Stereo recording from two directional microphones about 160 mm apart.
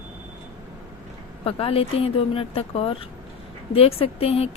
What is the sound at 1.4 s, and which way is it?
Speech, 35° left (ahead or behind).